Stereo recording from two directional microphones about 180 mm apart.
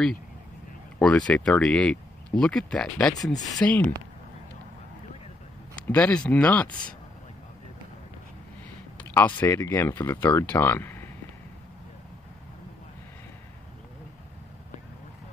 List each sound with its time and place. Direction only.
0.9 s speech: 5° left (ahead or behind)
3.3 s speech: 20° left (ahead or behind)
3.6 s speech: 5° left (ahead or behind)
5.8 s speech: 5° left (ahead or behind)
8.9 s speech: 10° left (ahead or behind)